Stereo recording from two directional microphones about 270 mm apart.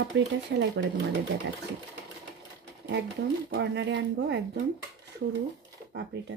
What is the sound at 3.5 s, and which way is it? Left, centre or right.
Speech, right.